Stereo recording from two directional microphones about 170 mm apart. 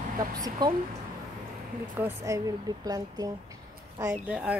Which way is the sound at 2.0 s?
15° right (ahead or behind).